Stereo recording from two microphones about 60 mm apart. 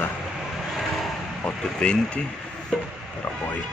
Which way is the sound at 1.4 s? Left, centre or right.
Centre.